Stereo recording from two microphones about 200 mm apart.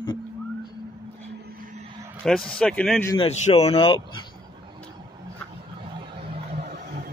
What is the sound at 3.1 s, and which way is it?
Speech, 30° left (ahead or behind).